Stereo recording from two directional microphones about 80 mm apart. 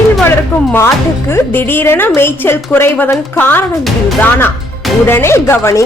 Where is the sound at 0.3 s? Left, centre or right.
Left.